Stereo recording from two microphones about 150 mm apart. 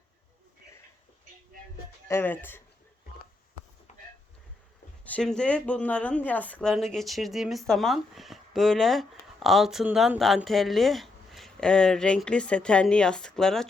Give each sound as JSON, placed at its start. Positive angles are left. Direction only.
{"t": 2.0, "sound": "speech", "side_deg": 15}
{"t": 5.0, "sound": "speech", "side_deg": 5}